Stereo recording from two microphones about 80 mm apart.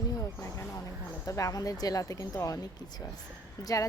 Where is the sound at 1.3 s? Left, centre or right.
Left.